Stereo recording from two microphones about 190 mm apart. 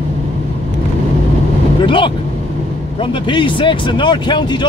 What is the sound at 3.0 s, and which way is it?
Speech, 25° left (ahead or behind).